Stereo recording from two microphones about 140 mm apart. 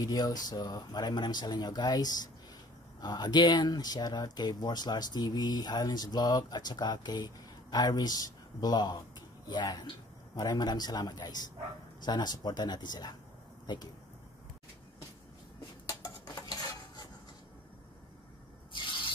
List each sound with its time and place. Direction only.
0.0 s speech: 30° left (ahead or behind)
15.9 s cutlery: 25° left (ahead or behind)